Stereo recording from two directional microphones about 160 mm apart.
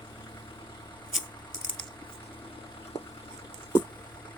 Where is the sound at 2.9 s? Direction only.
35° left (ahead or behind).